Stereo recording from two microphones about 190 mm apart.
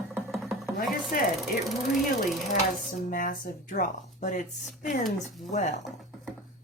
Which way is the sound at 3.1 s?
45° left (ahead or behind).